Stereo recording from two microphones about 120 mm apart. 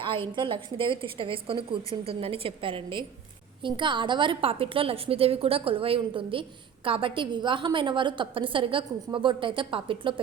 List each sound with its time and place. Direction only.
0.3 s a woman's voice: 45° right (ahead or behind)